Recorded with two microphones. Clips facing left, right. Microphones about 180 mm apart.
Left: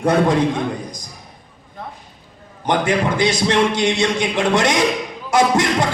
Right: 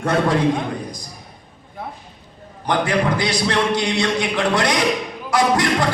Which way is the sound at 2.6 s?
25° left (ahead or behind).